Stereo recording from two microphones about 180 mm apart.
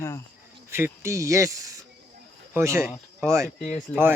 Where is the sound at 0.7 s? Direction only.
15° right (ahead or behind).